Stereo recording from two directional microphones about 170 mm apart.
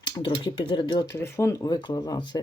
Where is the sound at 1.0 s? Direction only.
15° left (ahead or behind).